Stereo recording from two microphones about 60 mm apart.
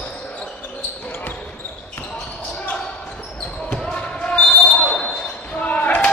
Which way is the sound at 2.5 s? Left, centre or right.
Left.